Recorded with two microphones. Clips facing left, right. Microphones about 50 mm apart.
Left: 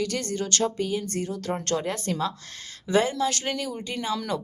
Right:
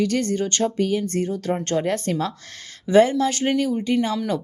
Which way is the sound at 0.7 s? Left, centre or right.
Right.